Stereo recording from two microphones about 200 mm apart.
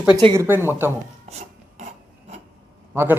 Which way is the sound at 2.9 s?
10° right (ahead or behind).